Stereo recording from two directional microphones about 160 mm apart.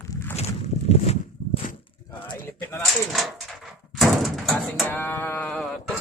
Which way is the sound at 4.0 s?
Centre (ahead or behind).